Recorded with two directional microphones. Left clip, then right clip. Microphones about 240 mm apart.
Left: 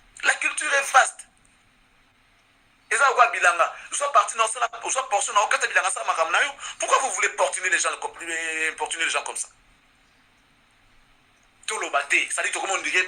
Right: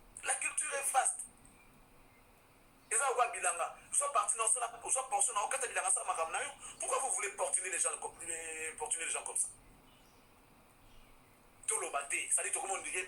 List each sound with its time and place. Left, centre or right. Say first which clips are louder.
0.2 s telephone: left 16 dB; left
3.1 s a sound: left 13 dB; left
3.5 s music: left 15 dB; left
4.3 s speech: left 13 dB; left
11.6 s speech: left 13 dB; left